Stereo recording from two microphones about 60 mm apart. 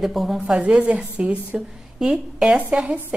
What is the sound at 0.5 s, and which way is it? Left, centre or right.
A woman's voice, centre.